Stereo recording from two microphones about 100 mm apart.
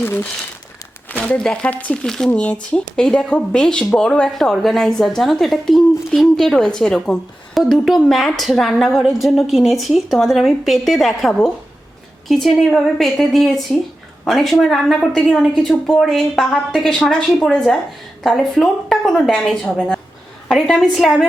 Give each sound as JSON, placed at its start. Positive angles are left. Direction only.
{"t": 0.0, "sound": "speech", "side_deg": 20}
{"t": 1.2, "sound": "a woman's voice", "side_deg": 10}